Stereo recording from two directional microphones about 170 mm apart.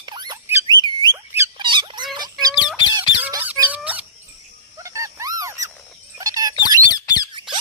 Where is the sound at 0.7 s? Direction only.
25° right (ahead or behind).